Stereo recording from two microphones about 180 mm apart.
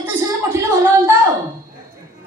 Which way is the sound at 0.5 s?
15° right (ahead or behind).